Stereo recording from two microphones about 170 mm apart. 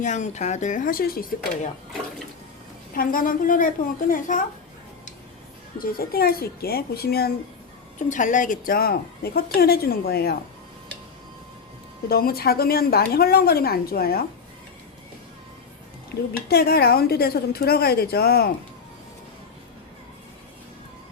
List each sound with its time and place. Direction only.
0.0 s speech: 45° left (ahead or behind)
2.9 s a woman's voice: 55° left (ahead or behind)
5.8 s a woman's voice: 60° left (ahead or behind)
7.9 s a woman's voice: 50° left (ahead or behind); by 10.3 s 65° left (ahead or behind)
12.0 s a woman's voice: 65° left (ahead or behind)
16.5 s a woman's voice: 65° left (ahead or behind)